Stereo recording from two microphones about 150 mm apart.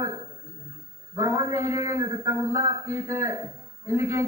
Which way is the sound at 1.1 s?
20° right (ahead or behind).